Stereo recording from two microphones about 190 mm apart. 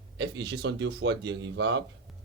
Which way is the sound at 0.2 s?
65° right (ahead or behind).